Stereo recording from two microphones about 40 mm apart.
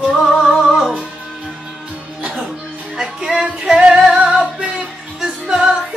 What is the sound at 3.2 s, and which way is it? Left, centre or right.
Music, centre.